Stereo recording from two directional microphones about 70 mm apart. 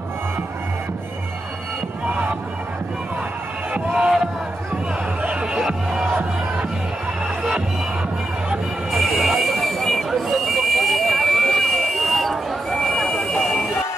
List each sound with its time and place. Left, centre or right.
3.7 s music: right
5.2 s music: centre
8.9 s buzzer: centre